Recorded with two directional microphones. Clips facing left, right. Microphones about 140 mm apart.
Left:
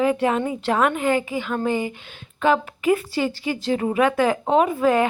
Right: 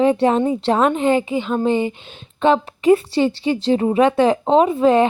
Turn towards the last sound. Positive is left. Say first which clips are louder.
# right 4 dB
turn(degrees=-30)  # may be behind; listen again after turning